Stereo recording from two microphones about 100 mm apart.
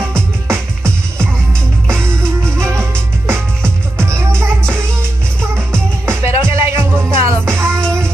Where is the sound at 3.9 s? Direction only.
30° right (ahead or behind).